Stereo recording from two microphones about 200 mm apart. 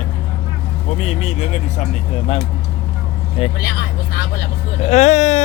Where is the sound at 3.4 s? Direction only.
30° left (ahead or behind).